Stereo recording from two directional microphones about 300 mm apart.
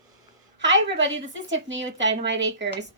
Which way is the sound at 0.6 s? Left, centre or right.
Right.